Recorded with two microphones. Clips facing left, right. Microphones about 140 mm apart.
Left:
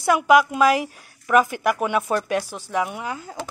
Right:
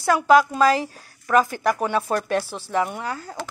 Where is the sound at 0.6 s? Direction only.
30° right (ahead or behind).